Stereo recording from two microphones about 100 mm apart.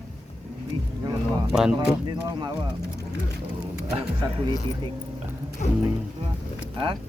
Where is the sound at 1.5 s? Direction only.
5° right (ahead or behind).